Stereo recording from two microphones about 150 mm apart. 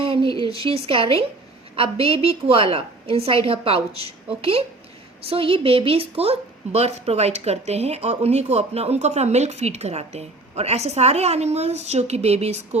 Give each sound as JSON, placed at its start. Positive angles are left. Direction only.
{"t": 0.0, "sound": "a woman's voice", "side_deg": -35}